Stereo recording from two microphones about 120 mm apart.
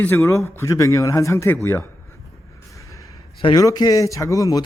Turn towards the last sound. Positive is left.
turn(degrees=30)  # may be behind; listen again after turning